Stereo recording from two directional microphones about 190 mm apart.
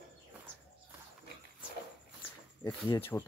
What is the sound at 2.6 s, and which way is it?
Speech, 25° left (ahead or behind).